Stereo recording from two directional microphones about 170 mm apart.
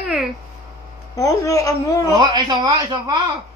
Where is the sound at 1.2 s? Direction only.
20° left (ahead or behind).